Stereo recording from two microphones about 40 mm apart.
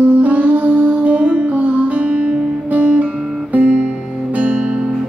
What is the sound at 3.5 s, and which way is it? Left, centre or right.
Guitar, right.